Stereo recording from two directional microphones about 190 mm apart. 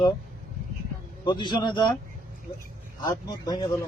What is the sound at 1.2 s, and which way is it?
Speech, 25° left (ahead or behind).